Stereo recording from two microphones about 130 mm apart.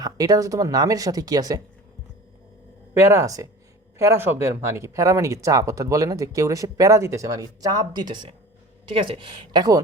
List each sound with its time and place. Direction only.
0.0 s speech: 30° right (ahead or behind)
3.0 s speech: 20° right (ahead or behind)